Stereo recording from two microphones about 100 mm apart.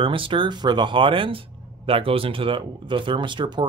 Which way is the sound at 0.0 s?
60° right (ahead or behind).